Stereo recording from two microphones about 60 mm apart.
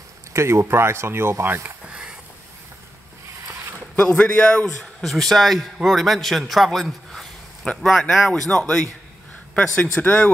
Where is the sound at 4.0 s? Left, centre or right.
Left.